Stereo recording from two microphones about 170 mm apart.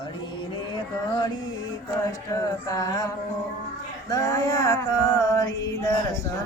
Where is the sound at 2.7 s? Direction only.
20° left (ahead or behind).